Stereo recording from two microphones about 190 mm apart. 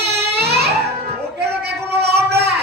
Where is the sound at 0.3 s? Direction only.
60° right (ahead or behind).